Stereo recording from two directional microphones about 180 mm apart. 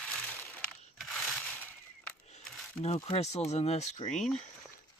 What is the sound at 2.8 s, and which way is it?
Speech, 35° left (ahead or behind).